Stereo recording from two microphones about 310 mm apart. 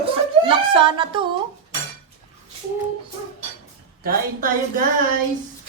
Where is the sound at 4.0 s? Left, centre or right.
Right.